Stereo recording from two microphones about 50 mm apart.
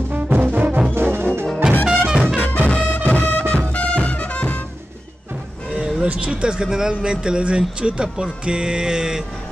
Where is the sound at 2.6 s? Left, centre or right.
Left.